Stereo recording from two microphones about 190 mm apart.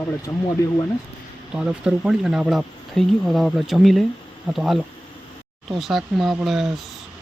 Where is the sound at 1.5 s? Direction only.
5° right (ahead or behind).